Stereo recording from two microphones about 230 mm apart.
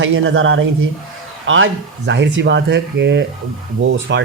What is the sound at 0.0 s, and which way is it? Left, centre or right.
Speech, right.